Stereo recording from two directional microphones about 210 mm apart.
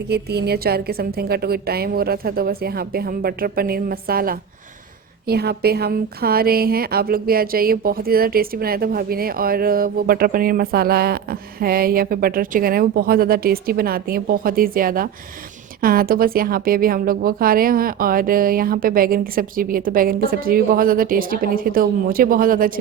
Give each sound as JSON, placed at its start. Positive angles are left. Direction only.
{"t": 0.1, "sound": "a woman's voice", "side_deg": -50}